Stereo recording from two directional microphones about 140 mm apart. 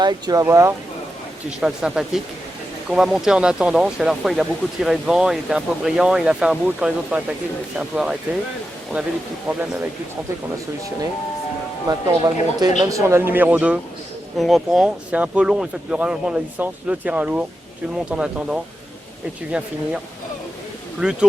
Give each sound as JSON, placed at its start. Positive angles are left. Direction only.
{"t": 0.0, "sound": "speech", "side_deg": -30}
{"t": 1.5, "sound": "speech", "side_deg": -5}
{"t": 11.9, "sound": "speech", "side_deg": -25}
{"t": 21.0, "sound": "speech", "side_deg": -5}